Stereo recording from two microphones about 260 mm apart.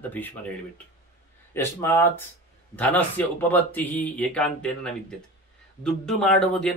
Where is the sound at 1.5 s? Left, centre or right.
Centre.